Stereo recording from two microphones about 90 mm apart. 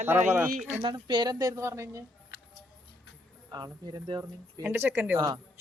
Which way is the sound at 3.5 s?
50° right (ahead or behind).